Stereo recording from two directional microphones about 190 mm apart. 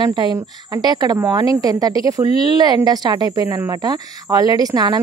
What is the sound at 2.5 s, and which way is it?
Speech, 20° right (ahead or behind).